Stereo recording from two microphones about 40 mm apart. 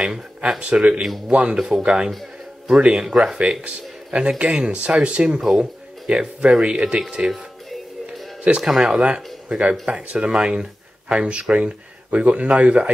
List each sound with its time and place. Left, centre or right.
0.0 s speech: centre
3.3 s speech: right
8.5 s speech: right
8.8 s speech: right